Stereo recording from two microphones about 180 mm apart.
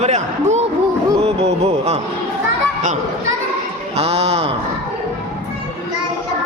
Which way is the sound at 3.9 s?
35° right (ahead or behind).